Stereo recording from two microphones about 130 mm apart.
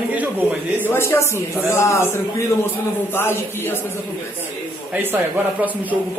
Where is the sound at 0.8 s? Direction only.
20° left (ahead or behind).